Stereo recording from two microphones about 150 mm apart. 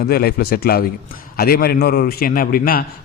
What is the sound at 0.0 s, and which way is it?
A man's voice, 90° left.